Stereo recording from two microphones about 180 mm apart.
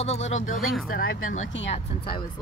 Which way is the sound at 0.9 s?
55° left (ahead or behind).